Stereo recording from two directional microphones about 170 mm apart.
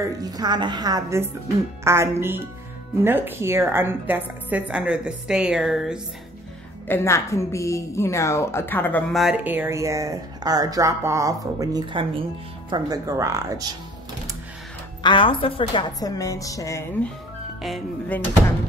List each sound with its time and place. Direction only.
0.2 s a woman's voice: 25° right (ahead or behind); by 5.9 s centre (ahead or behind)
6.9 s a woman's voice: 15° left (ahead or behind)
9.2 s speech: 5° right (ahead or behind)
15.0 s a woman's voice: 30° left (ahead or behind)
16.0 s speech: 20° left (ahead or behind)
17.6 s speech: centre (ahead or behind)